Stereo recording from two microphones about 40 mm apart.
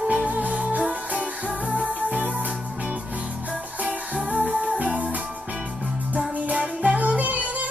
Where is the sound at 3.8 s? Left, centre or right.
Right.